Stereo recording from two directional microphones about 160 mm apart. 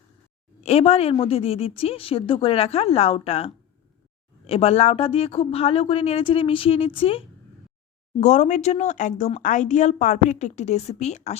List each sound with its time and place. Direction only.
0.6 s a woman's voice: 40° left (ahead or behind)
8.2 s speech: 45° left (ahead or behind)